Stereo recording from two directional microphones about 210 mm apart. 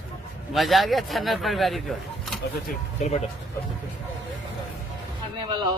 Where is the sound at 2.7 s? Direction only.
35° left (ahead or behind).